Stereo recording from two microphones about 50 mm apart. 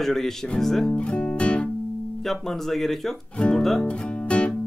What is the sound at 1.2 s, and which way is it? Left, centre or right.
Music, left.